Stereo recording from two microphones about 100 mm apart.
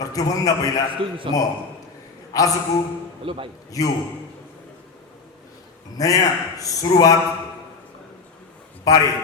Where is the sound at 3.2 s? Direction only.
60° right (ahead or behind).